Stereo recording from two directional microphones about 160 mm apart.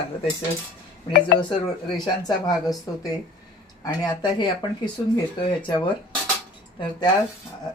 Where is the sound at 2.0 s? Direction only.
25° left (ahead or behind).